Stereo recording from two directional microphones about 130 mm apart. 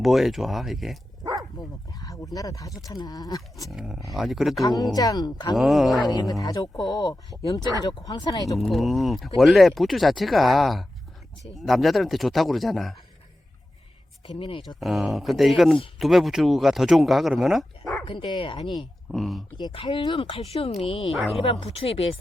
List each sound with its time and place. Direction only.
0.0 s speech: centre (ahead or behind)
1.2 s dog: 30° right (ahead or behind)
1.9 s speech: 25° left (ahead or behind)
3.7 s speech: 5° right (ahead or behind)
4.6 s speech: 30° left (ahead or behind)
5.5 s speech: centre (ahead or behind)
6.1 s speech: 30° left (ahead or behind)
8.5 s speech: centre (ahead or behind)
14.3 s speech: 40° left (ahead or behind)
14.8 s speech: centre (ahead or behind)
18.0 s speech: 40° left (ahead or behind)
18.8 s speech: centre (ahead or behind)
19.5 s speech: 40° left (ahead or behind)